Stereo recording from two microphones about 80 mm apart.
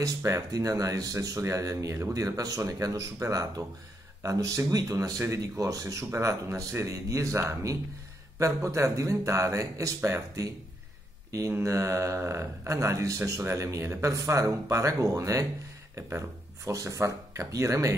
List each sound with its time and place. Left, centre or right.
0.0 s speech: right
11.5 s speech: right